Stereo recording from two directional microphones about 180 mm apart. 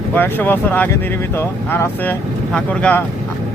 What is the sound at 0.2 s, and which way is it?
Speech, 10° left (ahead or behind).